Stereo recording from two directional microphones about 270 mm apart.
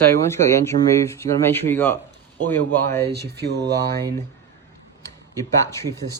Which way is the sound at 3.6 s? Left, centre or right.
Centre.